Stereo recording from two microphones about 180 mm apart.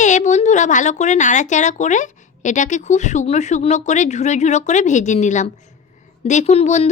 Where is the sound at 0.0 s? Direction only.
40° left (ahead or behind).